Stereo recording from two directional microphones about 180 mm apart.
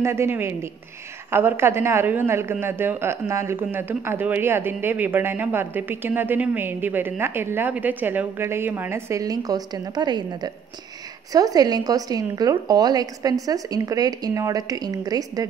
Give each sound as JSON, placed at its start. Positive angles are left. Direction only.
{"t": 0.0, "sound": "a woman's voice", "side_deg": -15}